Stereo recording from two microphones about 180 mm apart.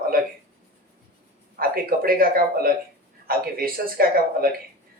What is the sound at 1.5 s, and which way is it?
Speech, 55° right (ahead or behind).